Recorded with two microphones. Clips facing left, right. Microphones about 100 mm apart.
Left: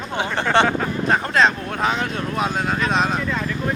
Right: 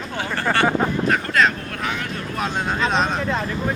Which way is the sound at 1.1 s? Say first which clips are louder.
Left 5 dB; 25° left (ahead or behind).